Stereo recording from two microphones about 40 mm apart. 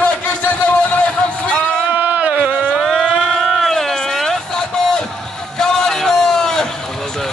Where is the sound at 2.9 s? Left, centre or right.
Centre.